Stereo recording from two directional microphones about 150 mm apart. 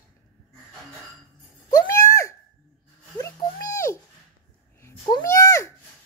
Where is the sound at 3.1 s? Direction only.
25° left (ahead or behind).